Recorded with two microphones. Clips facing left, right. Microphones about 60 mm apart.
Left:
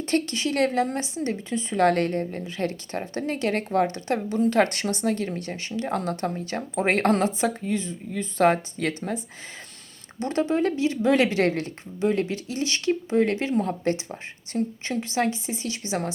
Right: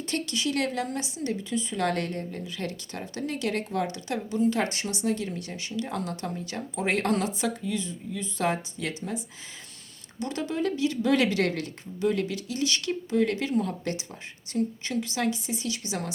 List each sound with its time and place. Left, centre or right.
0.0 s speech: left
10.2 s speech: left